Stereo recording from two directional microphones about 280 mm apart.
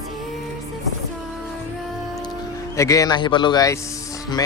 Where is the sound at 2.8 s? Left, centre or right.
Centre.